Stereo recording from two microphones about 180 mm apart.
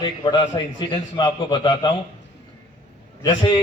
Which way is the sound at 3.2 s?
25° left (ahead or behind).